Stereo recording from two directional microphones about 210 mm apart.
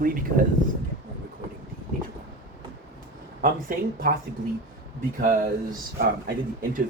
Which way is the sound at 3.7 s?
40° right (ahead or behind).